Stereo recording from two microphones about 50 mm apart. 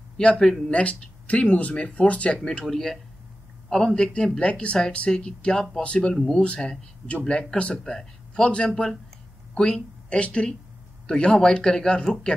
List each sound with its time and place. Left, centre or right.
0.2 s speech: centre
0.7 s speech: left
2.6 s speech: centre
6.1 s speech: centre
6.4 s a man's voice: centre